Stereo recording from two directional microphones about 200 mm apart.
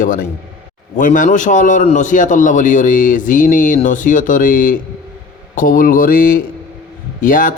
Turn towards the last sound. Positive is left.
turn(degrees=40)  # may be behind; listen again after turning